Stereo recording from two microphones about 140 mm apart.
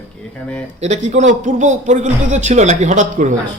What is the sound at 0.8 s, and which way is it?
Speech, 55° right (ahead or behind).